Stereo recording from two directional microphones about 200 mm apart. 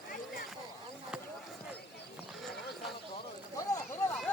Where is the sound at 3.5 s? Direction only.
15° left (ahead or behind).